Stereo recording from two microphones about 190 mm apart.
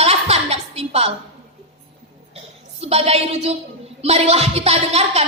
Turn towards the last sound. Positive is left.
turn(degrees=-35)  # may be behind; listen again after turning